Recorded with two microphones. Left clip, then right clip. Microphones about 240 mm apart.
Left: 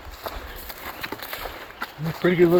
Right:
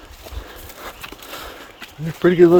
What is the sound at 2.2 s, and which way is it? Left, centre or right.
Speech, right.